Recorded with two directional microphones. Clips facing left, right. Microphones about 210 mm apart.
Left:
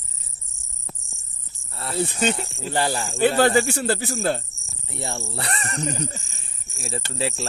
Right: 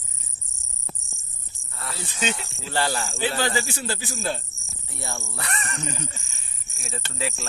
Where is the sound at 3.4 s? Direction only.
60° left (ahead or behind).